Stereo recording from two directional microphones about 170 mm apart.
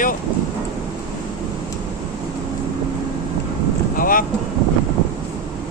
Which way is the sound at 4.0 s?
55° left (ahead or behind).